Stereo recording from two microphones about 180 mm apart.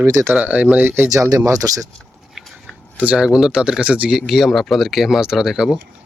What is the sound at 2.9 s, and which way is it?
Speech, 5° right (ahead or behind).